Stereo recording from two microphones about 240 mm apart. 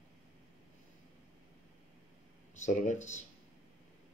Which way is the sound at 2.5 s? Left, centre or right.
Left.